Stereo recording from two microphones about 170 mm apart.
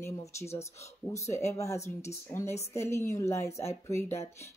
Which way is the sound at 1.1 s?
15° left (ahead or behind).